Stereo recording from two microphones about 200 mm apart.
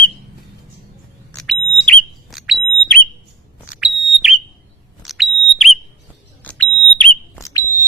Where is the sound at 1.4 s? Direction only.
5° left (ahead or behind).